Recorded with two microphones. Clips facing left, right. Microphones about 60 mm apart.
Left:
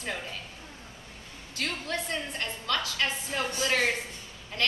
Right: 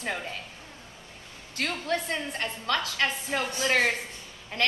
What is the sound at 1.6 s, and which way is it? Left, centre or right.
A woman's voice, right.